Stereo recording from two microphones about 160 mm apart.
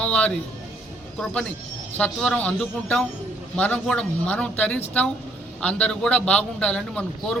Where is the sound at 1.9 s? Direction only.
5° left (ahead or behind).